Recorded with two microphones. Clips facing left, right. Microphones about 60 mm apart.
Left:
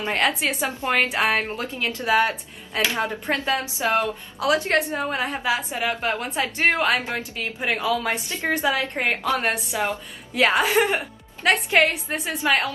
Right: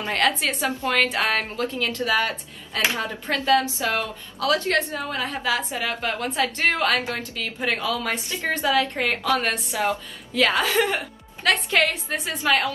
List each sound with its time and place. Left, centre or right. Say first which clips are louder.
0.0 s a woman's voice: even; left
0.7 s a woman's voice: right 1 dB; left